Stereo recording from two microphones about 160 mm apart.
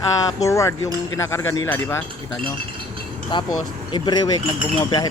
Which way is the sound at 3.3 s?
30° left (ahead or behind).